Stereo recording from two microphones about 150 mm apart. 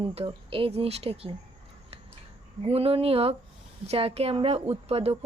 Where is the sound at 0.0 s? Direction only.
40° right (ahead or behind).